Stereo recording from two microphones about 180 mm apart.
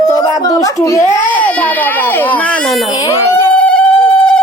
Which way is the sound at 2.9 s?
20° left (ahead or behind).